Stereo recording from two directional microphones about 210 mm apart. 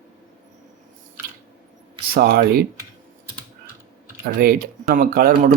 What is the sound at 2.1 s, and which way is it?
Speech, 45° right (ahead or behind).